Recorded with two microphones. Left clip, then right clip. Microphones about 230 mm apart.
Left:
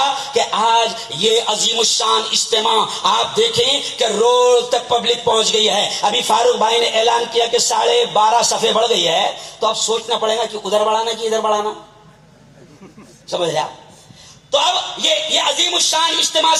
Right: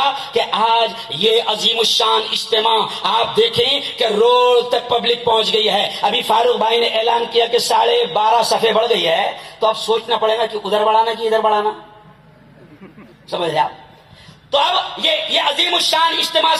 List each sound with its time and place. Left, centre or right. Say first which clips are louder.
0.3 s speech: left 1 dB; right
14.5 s speech: even; right